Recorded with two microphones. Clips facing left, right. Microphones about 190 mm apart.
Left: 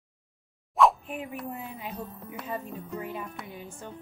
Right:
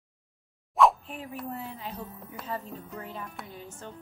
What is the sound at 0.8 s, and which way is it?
Plop, centre (ahead or behind).